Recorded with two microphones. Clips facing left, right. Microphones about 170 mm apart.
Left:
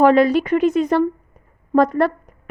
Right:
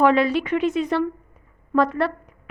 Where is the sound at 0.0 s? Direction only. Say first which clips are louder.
Left 5 dB; 40° left (ahead or behind).